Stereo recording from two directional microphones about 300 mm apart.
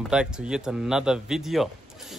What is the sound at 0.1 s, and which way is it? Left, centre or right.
Speech, centre.